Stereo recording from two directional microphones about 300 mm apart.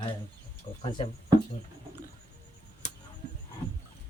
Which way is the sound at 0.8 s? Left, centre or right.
Centre.